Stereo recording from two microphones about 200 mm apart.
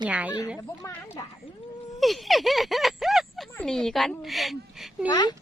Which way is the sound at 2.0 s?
Centre (ahead or behind).